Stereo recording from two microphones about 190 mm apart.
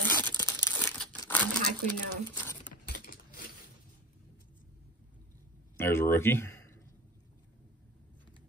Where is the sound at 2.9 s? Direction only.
50° left (ahead or behind).